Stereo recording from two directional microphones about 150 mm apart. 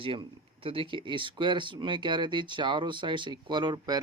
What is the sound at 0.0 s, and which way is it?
Speech, 35° right (ahead or behind).